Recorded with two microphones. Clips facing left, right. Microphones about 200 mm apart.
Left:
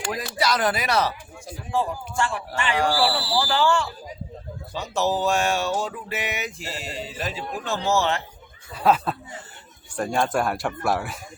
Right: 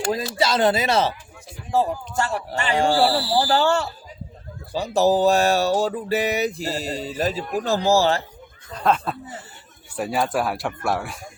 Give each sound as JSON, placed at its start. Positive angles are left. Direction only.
{"t": 0.1, "sound": "speech", "side_deg": -25}
{"t": 1.7, "sound": "music", "side_deg": -40}
{"t": 2.7, "sound": "music", "side_deg": -25}
{"t": 8.7, "sound": "speech", "side_deg": 5}
{"t": 9.9, "sound": "speech", "side_deg": -5}